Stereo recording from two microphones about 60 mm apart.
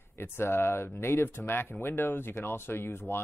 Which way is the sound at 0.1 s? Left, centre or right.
Left.